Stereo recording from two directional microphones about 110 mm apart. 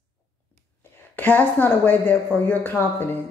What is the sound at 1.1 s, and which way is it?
A woman's voice, 15° left (ahead or behind).